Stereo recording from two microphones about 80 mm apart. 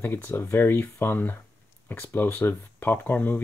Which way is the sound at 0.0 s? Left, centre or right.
Left.